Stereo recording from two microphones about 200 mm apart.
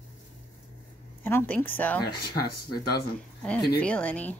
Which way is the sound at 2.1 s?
50° left (ahead or behind).